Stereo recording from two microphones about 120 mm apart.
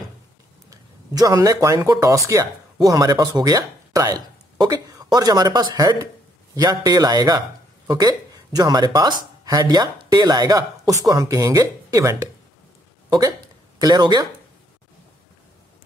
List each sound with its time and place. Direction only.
0.7 s speech: 30° right (ahead or behind)
13.7 s speech: 35° right (ahead or behind)